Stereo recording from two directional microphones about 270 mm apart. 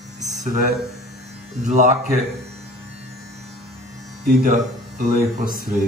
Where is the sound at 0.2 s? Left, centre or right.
Right.